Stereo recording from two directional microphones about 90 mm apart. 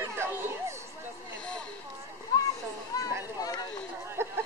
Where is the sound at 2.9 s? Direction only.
45° left (ahead or behind).